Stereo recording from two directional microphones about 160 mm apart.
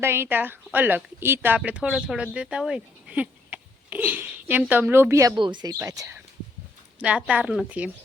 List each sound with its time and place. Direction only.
0.0 s speech: 15° right (ahead or behind)
5.8 s speech: 20° right (ahead or behind)
7.0 s speech: 10° right (ahead or behind)